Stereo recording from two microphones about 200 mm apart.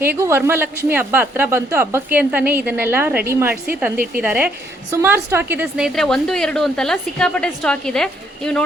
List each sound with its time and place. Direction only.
0.0 s speech: 10° right (ahead or behind)
3.9 s speech: 45° right (ahead or behind)
4.2 s a woman's voice: 5° right (ahead or behind)